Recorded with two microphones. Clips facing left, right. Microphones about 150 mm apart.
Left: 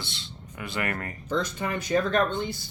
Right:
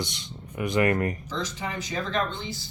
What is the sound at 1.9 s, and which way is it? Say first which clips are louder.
Speech: left 6 dB; 55° left (ahead or behind).